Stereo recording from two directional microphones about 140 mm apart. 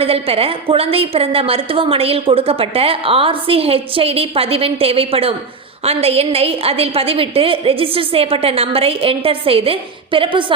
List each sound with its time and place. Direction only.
0.0 s a woman's voice: 45° right (ahead or behind)